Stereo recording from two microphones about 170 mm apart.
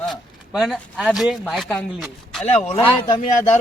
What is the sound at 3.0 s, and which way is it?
Speech, 30° left (ahead or behind).